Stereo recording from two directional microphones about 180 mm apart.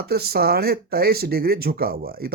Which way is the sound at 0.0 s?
60° right (ahead or behind).